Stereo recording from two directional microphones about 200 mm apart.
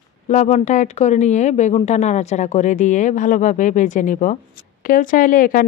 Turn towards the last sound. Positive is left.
turn(degrees=45)  # may be behind; listen again after turning